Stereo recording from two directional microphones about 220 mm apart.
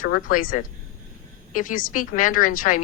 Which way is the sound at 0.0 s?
40° left (ahead or behind).